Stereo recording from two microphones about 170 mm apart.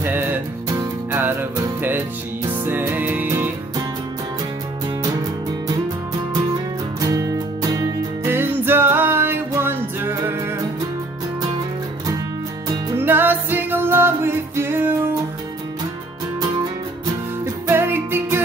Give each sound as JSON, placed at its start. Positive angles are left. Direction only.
{"t": 0.0, "sound": "music", "side_deg": -10}
{"t": 2.6, "sound": "music", "side_deg": -10}
{"t": 6.3, "sound": "music", "side_deg": -20}
{"t": 12.6, "sound": "music", "side_deg": -15}
{"t": 17.6, "sound": "music", "side_deg": -15}